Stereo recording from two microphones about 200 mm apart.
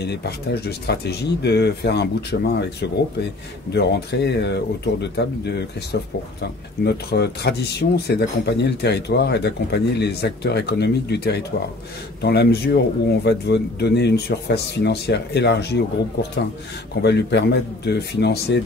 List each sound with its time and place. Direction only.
0.0 s speech: 55° left (ahead or behind)